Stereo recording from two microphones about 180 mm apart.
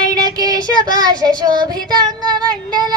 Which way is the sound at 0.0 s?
20° right (ahead or behind).